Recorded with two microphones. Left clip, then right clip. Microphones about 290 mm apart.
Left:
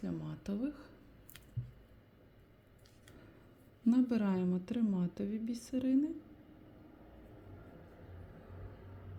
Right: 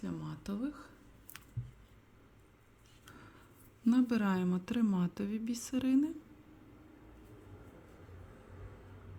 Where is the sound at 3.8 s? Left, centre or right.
Centre.